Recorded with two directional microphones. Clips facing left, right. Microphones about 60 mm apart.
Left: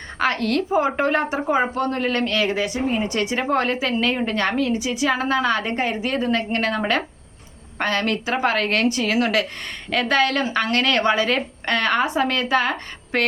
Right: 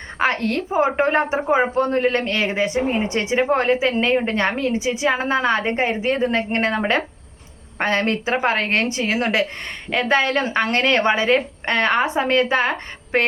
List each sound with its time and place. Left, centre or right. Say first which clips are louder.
0.2 s a woman's voice: even; right